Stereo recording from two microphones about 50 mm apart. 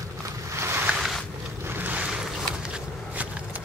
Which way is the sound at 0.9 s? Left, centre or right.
Centre.